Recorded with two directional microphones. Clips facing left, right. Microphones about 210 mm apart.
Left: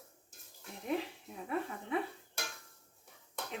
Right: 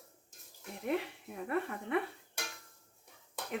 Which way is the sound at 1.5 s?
65° right (ahead or behind).